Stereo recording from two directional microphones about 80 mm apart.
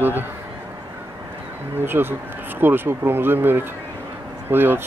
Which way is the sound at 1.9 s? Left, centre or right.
Right.